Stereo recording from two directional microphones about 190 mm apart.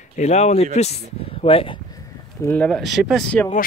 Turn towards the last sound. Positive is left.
turn(degrees=5)  # may be behind; listen again after turning